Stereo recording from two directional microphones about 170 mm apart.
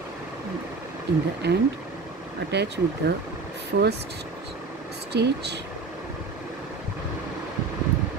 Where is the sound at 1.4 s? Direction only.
85° right.